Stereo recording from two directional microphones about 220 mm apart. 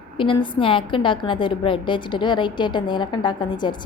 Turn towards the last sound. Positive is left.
turn(degrees=20)  # may be behind; listen again after turning